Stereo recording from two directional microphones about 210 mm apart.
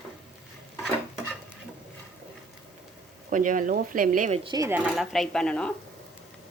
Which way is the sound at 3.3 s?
40° right (ahead or behind).